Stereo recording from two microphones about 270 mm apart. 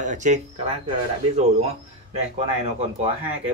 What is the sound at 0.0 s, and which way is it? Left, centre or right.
Speech, right.